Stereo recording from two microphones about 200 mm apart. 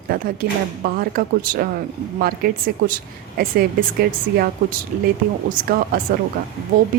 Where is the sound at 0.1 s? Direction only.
50° right (ahead or behind).